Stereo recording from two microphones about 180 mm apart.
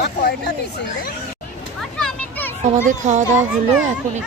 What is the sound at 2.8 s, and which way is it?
Speech, 45° right (ahead or behind).